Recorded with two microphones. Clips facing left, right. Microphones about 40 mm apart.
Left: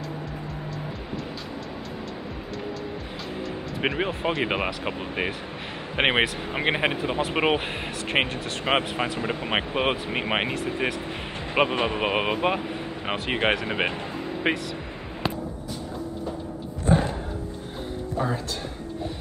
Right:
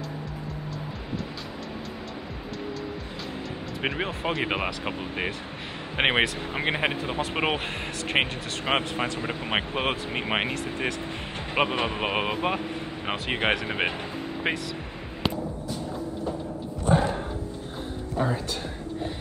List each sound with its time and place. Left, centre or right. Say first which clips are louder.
3.2 s speech: left 2 dB; centre